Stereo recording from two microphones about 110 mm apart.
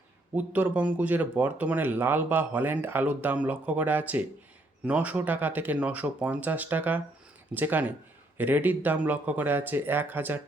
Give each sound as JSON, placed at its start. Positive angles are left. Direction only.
{"t": 0.3, "sound": "speech", "side_deg": -15}